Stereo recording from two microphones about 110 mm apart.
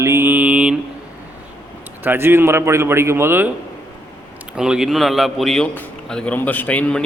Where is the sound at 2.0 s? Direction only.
20° right (ahead or behind).